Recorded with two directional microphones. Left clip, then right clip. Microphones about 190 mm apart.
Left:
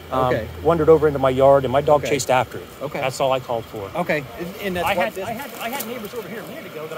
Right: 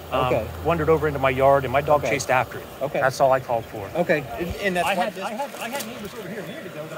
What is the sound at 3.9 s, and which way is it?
Speech, 50° left (ahead or behind).